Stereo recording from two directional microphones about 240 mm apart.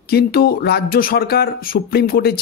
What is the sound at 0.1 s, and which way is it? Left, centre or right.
Speech, left.